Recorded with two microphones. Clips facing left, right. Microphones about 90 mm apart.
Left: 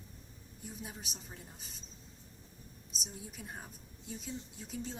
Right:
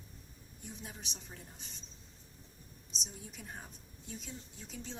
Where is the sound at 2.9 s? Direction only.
5° left (ahead or behind).